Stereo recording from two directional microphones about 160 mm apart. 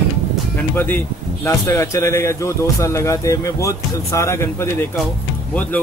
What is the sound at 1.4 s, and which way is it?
A man's voice, 20° left (ahead or behind).